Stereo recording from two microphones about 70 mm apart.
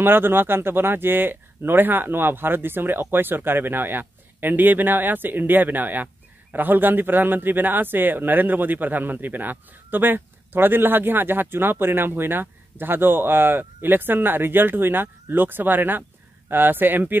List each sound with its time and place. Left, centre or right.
0.0 s a man's voice: right